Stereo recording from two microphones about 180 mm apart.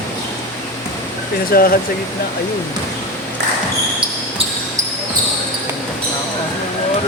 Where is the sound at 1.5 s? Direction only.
55° left (ahead or behind).